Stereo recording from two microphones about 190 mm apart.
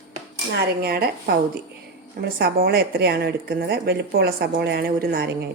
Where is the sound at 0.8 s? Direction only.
55° right (ahead or behind).